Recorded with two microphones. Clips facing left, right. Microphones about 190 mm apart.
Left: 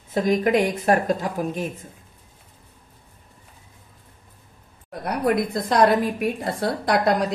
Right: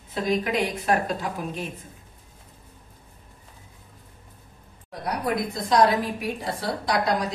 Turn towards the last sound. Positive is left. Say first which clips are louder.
# left 4 dB
turn(degrees=55)  # may be behind; listen again after turning